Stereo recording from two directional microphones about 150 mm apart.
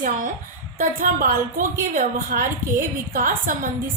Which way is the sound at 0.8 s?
70° right (ahead or behind).